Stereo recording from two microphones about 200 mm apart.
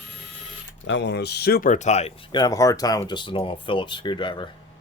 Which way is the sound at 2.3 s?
20° left (ahead or behind).